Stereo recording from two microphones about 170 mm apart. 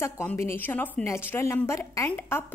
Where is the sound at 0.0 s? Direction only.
10° left (ahead or behind).